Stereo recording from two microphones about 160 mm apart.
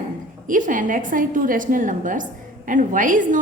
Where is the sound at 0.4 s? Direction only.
55° right (ahead or behind).